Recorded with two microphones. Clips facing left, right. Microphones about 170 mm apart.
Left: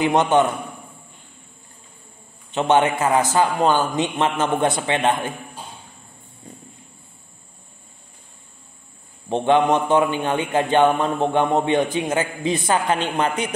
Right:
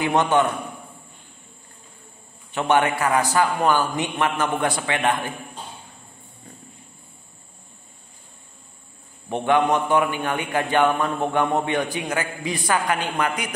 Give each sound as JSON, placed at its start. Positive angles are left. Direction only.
{"t": 0.0, "sound": "a man's voice", "side_deg": 20}
{"t": 2.5, "sound": "a man's voice", "side_deg": 20}
{"t": 9.3, "sound": "a man's voice", "side_deg": 20}